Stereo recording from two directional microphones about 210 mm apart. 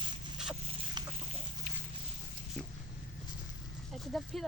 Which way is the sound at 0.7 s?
25° right (ahead or behind).